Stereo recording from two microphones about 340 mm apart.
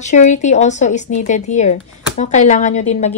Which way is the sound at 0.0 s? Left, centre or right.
Left.